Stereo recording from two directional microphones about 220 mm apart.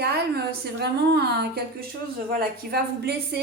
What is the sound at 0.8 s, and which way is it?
A woman's voice, 45° right (ahead or behind).